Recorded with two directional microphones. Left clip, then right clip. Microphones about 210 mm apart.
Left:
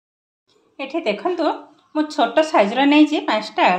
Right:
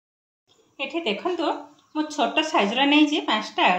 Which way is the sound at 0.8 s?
35° left (ahead or behind).